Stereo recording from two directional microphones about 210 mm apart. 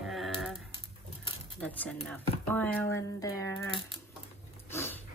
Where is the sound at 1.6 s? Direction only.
5° left (ahead or behind).